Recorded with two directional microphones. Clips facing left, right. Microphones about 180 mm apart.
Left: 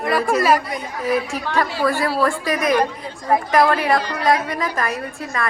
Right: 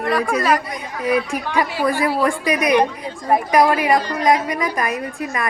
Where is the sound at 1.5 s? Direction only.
15° right (ahead or behind).